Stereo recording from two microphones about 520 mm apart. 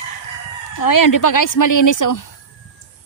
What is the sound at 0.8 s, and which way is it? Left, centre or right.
Speech, left.